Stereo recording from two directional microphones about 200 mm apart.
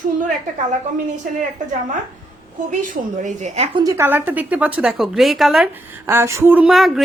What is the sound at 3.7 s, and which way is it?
A woman's voice, 15° right (ahead or behind).